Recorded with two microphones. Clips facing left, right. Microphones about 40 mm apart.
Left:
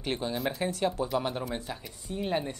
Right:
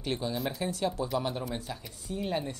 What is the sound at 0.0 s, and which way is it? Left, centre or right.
Speech, left.